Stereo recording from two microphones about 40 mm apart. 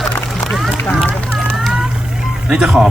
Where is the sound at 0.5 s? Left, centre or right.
Centre.